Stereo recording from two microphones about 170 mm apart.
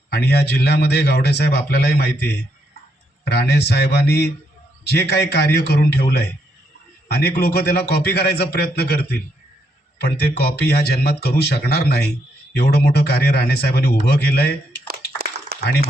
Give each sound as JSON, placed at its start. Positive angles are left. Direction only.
{"t": 0.1, "sound": "speech", "side_deg": 70}
{"t": 3.2, "sound": "speech", "side_deg": 75}
{"t": 14.8, "sound": "a sound", "side_deg": -65}